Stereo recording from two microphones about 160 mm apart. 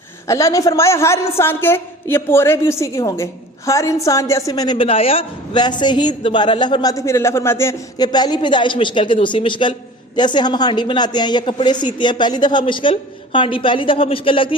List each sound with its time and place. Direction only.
0.3 s a woman's voice: 20° left (ahead or behind)